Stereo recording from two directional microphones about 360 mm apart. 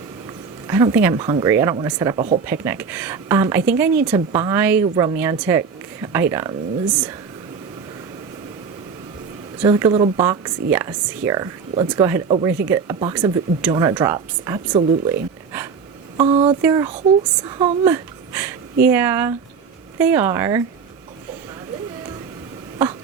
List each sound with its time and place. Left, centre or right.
0.7 s speech: centre
9.6 s speech: centre
16.1 s a child's voice: centre